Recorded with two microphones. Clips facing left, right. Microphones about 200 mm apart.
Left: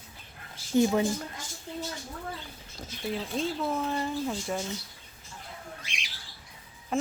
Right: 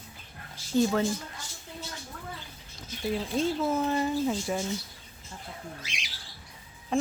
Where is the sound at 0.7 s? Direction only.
15° left (ahead or behind).